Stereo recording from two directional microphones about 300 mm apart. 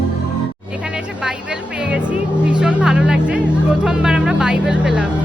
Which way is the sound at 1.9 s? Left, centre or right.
Centre.